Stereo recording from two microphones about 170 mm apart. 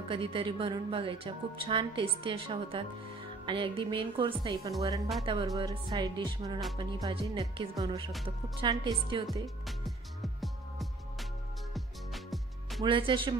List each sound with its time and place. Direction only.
0.1 s a woman's voice: 30° right (ahead or behind)
9.7 s music: centre (ahead or behind)
12.8 s a woman's voice: 30° right (ahead or behind)